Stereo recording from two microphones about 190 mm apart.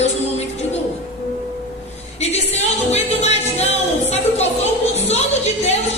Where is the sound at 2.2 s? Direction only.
35° left (ahead or behind).